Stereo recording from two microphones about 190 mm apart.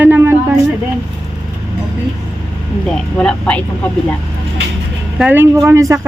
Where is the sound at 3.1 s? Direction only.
5° left (ahead or behind).